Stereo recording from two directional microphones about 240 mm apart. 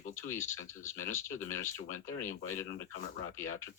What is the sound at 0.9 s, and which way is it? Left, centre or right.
Speech, left.